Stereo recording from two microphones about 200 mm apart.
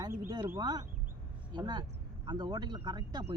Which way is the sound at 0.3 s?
15° right (ahead or behind).